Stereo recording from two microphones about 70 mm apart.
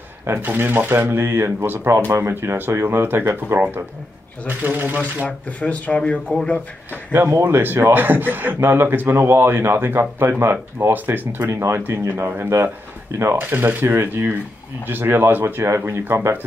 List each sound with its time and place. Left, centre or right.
0.3 s speech: right
5.2 s speech: centre
7.1 s speech: right
11.7 s speech: right